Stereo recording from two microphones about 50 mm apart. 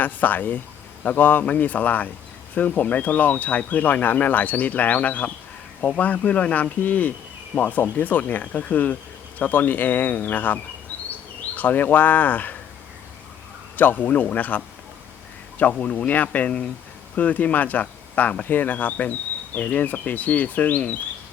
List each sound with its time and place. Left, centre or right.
0.0 s speech: left
13.7 s speech: left
15.8 s speech: left